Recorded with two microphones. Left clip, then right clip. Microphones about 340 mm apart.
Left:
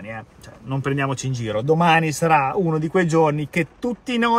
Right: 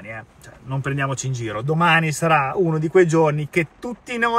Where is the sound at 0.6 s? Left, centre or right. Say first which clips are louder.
Left 1 dB; centre.